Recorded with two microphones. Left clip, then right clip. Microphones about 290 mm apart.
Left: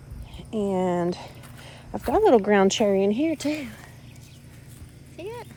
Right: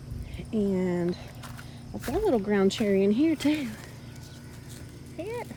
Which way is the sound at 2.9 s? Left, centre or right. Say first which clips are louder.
Left 2 dB; centre.